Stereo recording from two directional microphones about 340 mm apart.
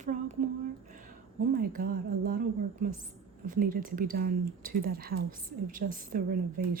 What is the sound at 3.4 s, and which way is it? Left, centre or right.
Speech, right.